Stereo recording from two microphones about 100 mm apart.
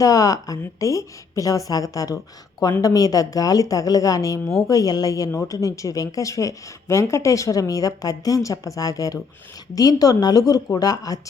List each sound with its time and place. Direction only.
0.0 s a woman's voice: 35° left (ahead or behind)